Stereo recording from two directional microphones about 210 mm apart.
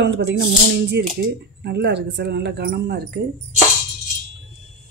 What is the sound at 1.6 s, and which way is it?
Speech, 50° right (ahead or behind).